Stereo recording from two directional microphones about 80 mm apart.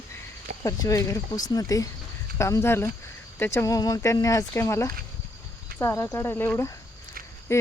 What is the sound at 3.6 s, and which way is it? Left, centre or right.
Speech, left.